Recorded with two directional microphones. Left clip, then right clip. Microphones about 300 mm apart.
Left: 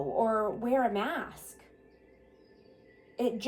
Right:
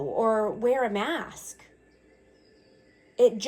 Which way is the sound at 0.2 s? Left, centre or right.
Right.